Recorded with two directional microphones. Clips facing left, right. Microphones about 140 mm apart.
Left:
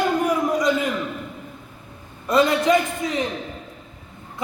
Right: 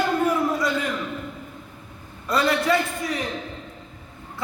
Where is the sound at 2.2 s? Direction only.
20° left (ahead or behind).